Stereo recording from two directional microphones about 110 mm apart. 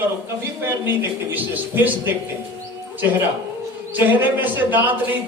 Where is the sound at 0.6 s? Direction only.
20° right (ahead or behind).